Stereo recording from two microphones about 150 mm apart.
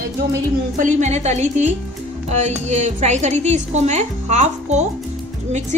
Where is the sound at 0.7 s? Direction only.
55° right (ahead or behind).